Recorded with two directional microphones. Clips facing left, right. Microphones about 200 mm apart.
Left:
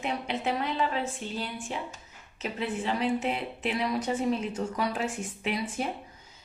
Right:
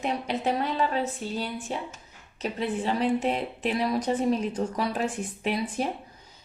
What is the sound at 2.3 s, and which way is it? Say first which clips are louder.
A woman's voice: right 3 dB; 35° right (ahead or behind).